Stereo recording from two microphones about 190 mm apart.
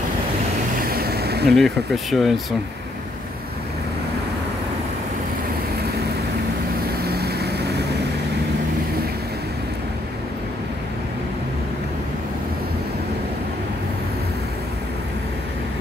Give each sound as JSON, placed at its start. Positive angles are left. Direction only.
{"t": 0.8, "sound": "a sound", "side_deg": -55}
{"t": 1.6, "sound": "speech", "side_deg": 0}
{"t": 7.1, "sound": "vehicle", "side_deg": -55}